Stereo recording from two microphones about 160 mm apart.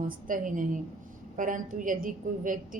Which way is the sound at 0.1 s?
60° right (ahead or behind).